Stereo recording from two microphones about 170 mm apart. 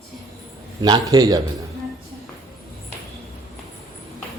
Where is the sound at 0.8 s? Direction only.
25° right (ahead or behind).